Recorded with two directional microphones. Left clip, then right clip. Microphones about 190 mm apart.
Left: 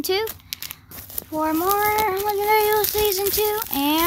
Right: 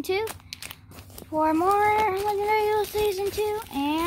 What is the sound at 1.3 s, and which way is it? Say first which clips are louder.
Child singing: even; 10° left (ahead or behind).